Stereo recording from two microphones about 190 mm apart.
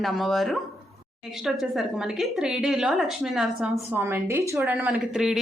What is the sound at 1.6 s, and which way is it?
A woman's voice, centre (ahead or behind).